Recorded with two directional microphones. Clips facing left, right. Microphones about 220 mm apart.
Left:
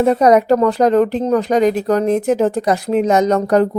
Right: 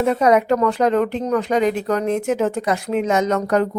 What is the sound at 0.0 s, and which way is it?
Speech, 40° left (ahead or behind).